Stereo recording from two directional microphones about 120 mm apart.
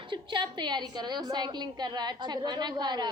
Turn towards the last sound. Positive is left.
turn(degrees=-35)  # may be behind; listen again after turning